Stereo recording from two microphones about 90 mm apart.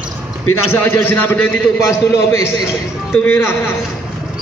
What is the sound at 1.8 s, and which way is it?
Speech, 35° left (ahead or behind).